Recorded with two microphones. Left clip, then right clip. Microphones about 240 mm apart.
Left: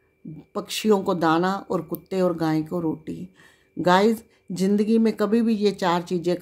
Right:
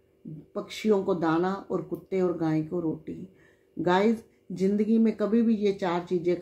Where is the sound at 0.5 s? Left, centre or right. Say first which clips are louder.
Left 4 dB; left.